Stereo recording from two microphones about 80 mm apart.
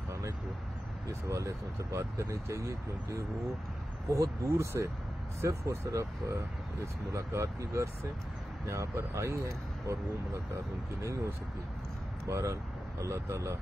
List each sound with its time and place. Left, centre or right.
1.0 s speech: right
12.3 s speech: right